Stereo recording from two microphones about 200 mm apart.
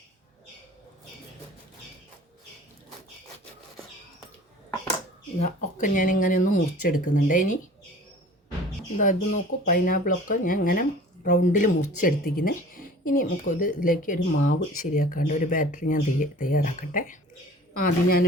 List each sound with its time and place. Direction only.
5.4 s speech: 40° left (ahead or behind)
9.0 s speech: 40° left (ahead or behind)